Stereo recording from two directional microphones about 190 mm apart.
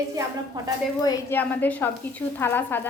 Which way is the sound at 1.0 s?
10° left (ahead or behind).